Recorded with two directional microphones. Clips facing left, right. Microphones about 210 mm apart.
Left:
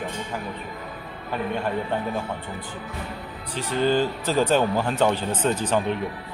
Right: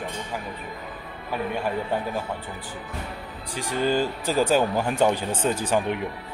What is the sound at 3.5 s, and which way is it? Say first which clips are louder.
Speech: left 2 dB; 10° right (ahead or behind).